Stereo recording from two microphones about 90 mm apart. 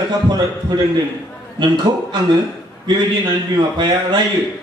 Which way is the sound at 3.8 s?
60° right (ahead or behind).